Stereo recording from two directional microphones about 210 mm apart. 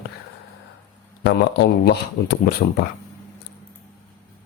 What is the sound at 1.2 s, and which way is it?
Speech, 50° left (ahead or behind).